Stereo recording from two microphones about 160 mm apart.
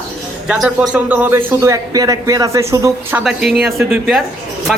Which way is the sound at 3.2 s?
5° right (ahead or behind).